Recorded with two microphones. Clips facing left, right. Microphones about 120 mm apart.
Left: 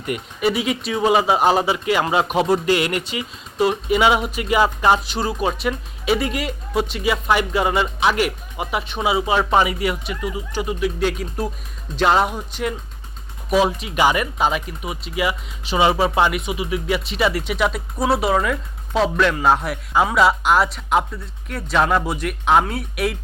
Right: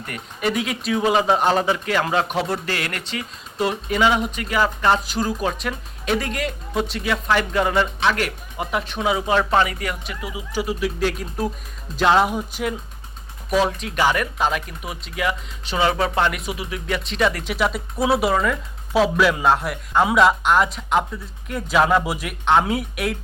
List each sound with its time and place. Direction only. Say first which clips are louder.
0.0 s speech: left 4 dB; 5° left (ahead or behind)
5.1 s speech: left 1 dB; 5° left (ahead or behind)